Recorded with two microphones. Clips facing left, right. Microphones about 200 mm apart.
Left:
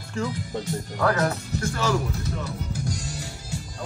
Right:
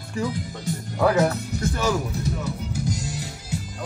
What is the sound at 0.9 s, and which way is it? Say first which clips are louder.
Speech: right 4 dB; 5° right (ahead or behind).